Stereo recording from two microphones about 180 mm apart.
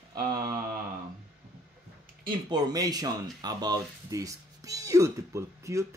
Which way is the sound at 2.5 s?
20° right (ahead or behind).